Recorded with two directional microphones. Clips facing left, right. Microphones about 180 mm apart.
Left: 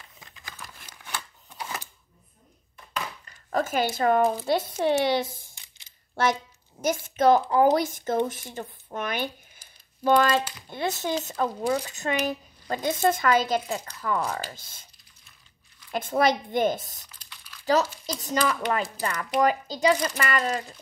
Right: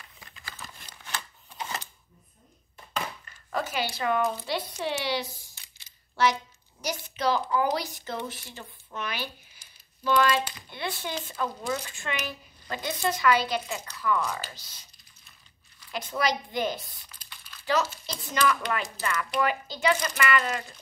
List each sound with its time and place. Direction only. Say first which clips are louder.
0.4 s crumpling: even; 15° left (ahead or behind)
1.6 s a sound: even; 10° left (ahead or behind)
3.4 s zipper: left 5 dB; 45° left (ahead or behind)
3.9 s speech: left 5 dB; 45° left (ahead or behind)
15.9 s speech: left 6 dB; 50° left (ahead or behind)
17.2 s crumpling: right 1 dB; centre (ahead or behind)
17.6 s speech: left 4 dB; 40° left (ahead or behind)